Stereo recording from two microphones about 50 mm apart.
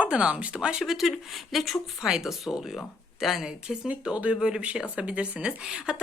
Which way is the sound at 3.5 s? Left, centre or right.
Centre.